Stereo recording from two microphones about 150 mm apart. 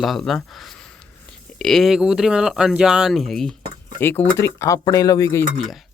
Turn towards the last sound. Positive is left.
turn(degrees=0)  # may be behind; listen again after turning